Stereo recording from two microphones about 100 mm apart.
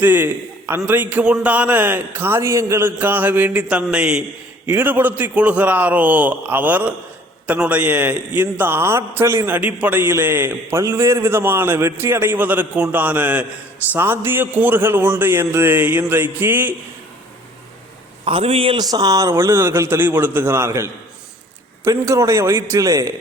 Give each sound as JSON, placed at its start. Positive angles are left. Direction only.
{"t": 0.0, "sound": "a man's voice", "side_deg": -20}
{"t": 4.7, "sound": "a man's voice", "side_deg": -20}
{"t": 9.6, "sound": "a man's voice", "side_deg": -15}
{"t": 18.3, "sound": "a man's voice", "side_deg": -70}
{"t": 18.8, "sound": "speech", "side_deg": -40}
{"t": 19.3, "sound": "a man's voice", "side_deg": -25}